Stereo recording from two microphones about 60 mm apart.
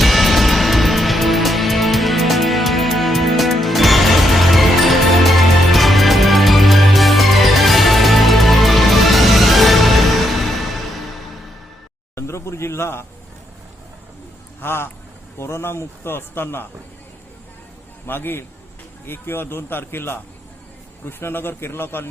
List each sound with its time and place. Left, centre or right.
0.0 s music: centre
12.1 s a sound: left
14.6 s a man's voice: left
18.0 s a man's voice: left